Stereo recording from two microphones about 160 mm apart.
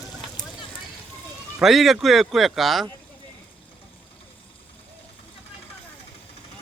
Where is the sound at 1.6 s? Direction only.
Centre (ahead or behind).